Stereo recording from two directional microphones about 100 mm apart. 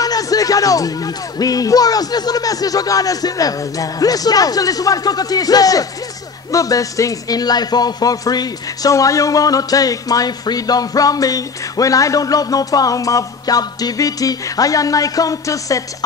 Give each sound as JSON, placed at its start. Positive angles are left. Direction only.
{"t": 0.0, "sound": "speech", "side_deg": 35}